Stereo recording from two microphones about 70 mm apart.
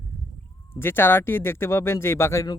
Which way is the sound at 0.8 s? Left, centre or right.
Left.